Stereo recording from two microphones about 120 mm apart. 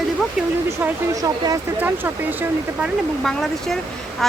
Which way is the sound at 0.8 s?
30° right (ahead or behind).